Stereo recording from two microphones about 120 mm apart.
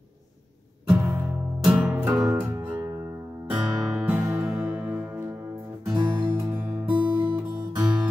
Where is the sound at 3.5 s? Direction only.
5° right (ahead or behind).